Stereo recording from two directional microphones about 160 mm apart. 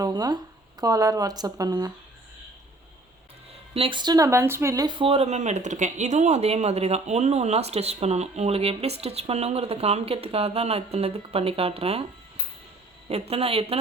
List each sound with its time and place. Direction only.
0.0 s speech: 25° right (ahead or behind)
3.8 s speech: 30° right (ahead or behind)
13.1 s speech: 40° right (ahead or behind)